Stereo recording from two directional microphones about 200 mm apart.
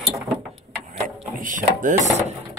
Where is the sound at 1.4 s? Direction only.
40° right (ahead or behind).